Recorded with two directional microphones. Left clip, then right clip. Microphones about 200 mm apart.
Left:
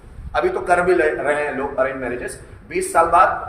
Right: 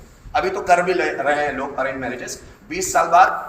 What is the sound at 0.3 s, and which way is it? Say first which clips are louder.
A man's voice: right 1 dB; 20° left (ahead or behind).